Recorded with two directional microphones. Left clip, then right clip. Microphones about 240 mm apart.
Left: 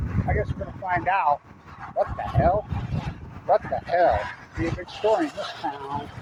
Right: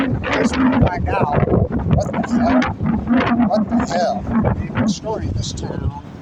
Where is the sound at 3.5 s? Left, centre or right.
Right.